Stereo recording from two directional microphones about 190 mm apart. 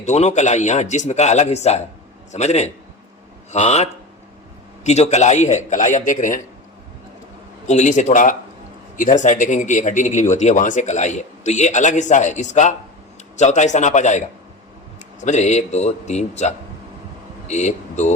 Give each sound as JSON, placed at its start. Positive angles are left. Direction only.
{"t": 0.0, "sound": "speech", "side_deg": 35}
{"t": 7.7, "sound": "speech", "side_deg": 40}